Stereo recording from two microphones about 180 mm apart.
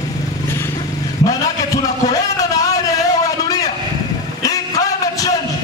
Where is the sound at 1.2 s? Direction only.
20° left (ahead or behind).